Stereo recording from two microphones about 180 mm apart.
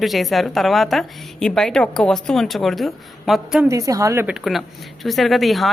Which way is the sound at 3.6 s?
20° right (ahead or behind).